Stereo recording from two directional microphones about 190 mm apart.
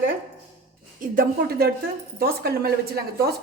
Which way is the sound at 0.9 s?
45° right (ahead or behind).